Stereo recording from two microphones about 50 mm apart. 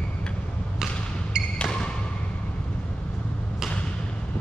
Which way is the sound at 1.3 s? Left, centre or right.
Centre.